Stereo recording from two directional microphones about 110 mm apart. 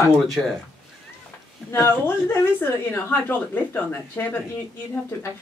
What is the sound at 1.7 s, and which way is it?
A woman's voice, 20° left (ahead or behind).